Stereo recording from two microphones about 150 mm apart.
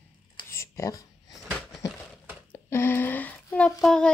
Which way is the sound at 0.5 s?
20° left (ahead or behind).